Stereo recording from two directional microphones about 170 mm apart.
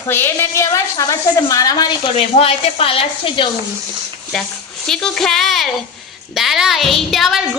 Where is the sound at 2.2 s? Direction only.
35° left (ahead or behind).